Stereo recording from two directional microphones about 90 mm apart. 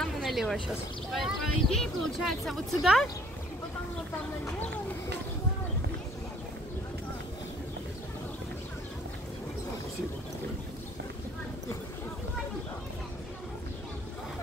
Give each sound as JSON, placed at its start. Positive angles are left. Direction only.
{"t": 0.0, "sound": "speech", "side_deg": 0}